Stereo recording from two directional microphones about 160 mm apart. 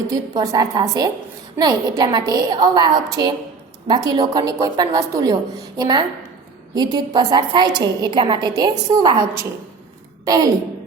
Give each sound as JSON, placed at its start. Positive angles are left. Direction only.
{"t": 0.1, "sound": "a woman's voice", "side_deg": -25}